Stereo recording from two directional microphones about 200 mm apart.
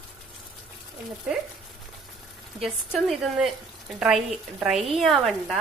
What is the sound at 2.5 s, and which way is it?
Speech, centre (ahead or behind).